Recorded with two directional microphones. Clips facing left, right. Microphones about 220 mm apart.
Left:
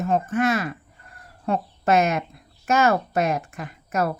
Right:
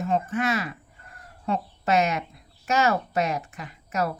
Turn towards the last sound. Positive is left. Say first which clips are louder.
# left 3 dB
turn(degrees=50)  # may be behind; listen again after turning